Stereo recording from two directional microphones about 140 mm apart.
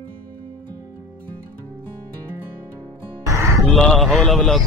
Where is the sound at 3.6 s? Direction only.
5° left (ahead or behind).